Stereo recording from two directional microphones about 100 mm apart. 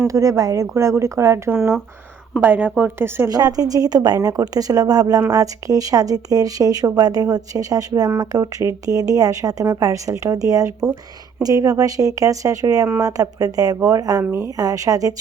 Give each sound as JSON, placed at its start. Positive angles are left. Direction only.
{"t": 0.0, "sound": "a woman's voice", "side_deg": -35}
{"t": 3.2, "sound": "speech", "side_deg": -40}